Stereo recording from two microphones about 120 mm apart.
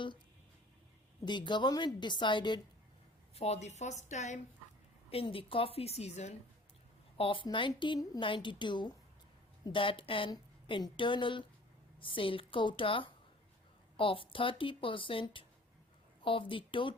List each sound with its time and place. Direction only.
1.2 s a woman's voice: 40° left (ahead or behind)
3.3 s a woman's voice: 60° left (ahead or behind); by 4.4 s 75° left (ahead or behind)
5.1 s a woman's voice: 50° left (ahead or behind); by 6.3 s 65° left (ahead or behind)
7.2 s a woman's voice: 45° left (ahead or behind)